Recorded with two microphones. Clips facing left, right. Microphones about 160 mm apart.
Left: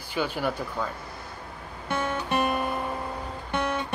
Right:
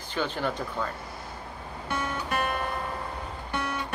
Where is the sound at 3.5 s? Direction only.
25° left (ahead or behind).